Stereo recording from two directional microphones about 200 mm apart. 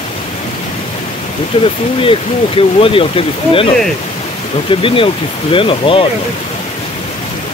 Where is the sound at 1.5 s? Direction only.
25° left (ahead or behind).